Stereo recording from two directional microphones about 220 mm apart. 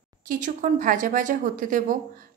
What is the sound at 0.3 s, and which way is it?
A woman's voice, 35° right (ahead or behind).